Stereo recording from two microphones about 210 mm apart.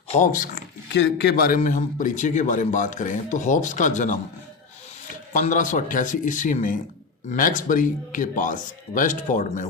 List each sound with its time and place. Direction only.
0.1 s a man's voice: 35° left (ahead or behind)
0.9 s a man's voice: 55° left (ahead or behind); by 4.2 s 35° left (ahead or behind)
5.3 s a man's voice: 40° left (ahead or behind)